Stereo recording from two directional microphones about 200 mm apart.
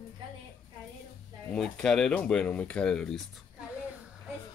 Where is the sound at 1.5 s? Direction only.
Centre (ahead or behind).